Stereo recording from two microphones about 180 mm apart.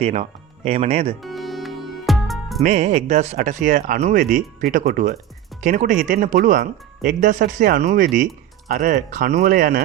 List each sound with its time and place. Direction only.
0.0 s speech: 40° right (ahead or behind)
1.2 s music: centre (ahead or behind)
2.6 s speech: 40° right (ahead or behind); by 9.8 s 55° right (ahead or behind)